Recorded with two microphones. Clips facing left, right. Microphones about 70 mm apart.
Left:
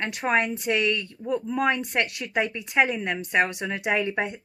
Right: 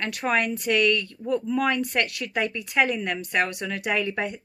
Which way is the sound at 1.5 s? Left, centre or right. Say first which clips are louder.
Left 1 dB; left.